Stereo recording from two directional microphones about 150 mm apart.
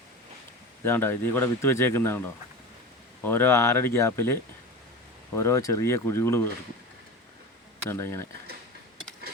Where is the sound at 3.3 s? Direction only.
15° left (ahead or behind).